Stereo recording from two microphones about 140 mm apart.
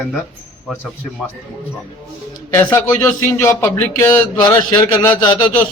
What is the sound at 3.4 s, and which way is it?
Speech, 15° left (ahead or behind).